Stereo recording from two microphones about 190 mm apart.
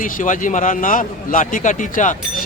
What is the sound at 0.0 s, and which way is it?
A man's voice, 45° left (ahead or behind).